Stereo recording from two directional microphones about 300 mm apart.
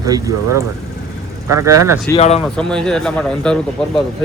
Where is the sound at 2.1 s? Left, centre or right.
Centre.